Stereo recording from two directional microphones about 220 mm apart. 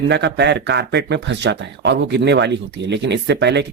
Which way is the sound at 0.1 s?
50° right (ahead or behind).